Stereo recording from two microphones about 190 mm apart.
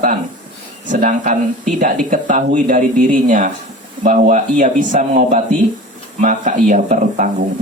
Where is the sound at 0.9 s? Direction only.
40° right (ahead or behind).